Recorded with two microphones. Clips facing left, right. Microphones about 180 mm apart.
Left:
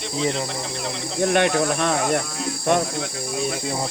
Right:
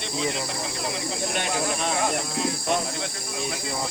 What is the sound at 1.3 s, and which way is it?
Speech, 60° left (ahead or behind).